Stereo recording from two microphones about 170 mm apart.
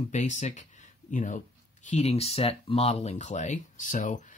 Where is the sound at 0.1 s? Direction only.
45° left (ahead or behind).